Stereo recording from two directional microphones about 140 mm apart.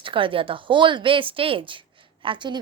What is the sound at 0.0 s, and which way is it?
Speech, 40° right (ahead or behind).